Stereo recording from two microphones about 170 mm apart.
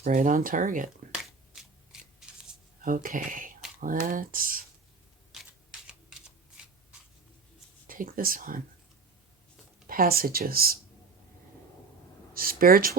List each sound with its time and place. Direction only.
0.0 s speech: 50° right (ahead or behind)
1.1 s a sound: 5° right (ahead or behind)
2.8 s speech: 55° right (ahead or behind)
7.9 s speech: 55° right (ahead or behind)
9.8 s speech: 60° right (ahead or behind)
12.3 s speech: 60° right (ahead or behind)